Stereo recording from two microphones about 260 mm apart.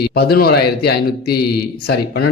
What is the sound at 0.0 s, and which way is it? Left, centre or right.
Speech, left.